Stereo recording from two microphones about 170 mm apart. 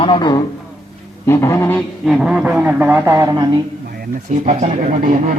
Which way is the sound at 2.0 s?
5° right (ahead or behind).